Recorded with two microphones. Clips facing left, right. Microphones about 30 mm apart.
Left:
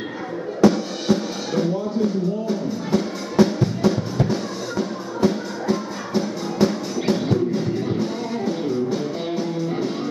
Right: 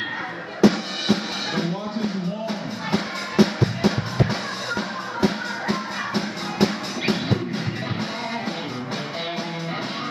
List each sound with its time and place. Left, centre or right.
0.7 s music: right